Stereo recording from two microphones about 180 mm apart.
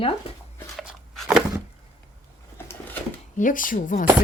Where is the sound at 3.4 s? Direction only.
50° left (ahead or behind).